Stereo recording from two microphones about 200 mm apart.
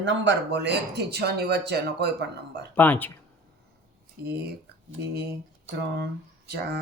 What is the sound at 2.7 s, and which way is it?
Speech, 10° left (ahead or behind).